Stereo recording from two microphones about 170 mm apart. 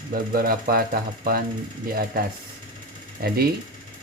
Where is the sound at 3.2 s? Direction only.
65° right (ahead or behind).